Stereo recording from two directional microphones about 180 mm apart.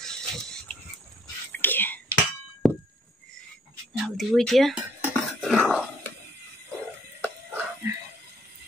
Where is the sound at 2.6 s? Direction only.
Centre (ahead or behind).